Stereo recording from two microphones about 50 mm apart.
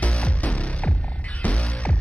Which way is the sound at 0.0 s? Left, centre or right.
Left.